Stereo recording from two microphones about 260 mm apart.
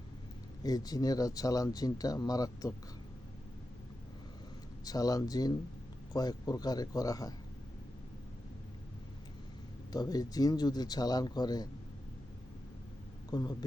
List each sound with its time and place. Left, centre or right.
0.6 s speech: centre
4.9 s speech: centre
9.9 s speech: centre
13.3 s speech: centre